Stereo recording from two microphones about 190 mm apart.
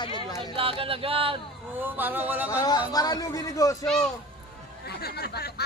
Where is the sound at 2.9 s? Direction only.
20° left (ahead or behind).